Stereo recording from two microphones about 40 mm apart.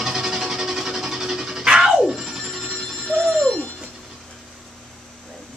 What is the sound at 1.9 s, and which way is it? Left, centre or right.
Music, centre.